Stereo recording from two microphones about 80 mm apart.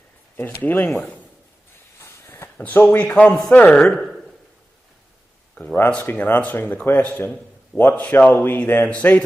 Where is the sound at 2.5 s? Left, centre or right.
Centre.